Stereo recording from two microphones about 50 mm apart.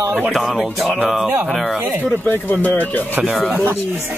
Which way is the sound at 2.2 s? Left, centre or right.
Left.